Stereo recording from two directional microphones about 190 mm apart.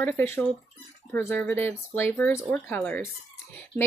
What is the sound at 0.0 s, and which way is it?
Speech, 10° left (ahead or behind).